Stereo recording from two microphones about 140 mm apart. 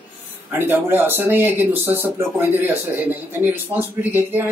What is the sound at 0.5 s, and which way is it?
Speech, 15° right (ahead or behind).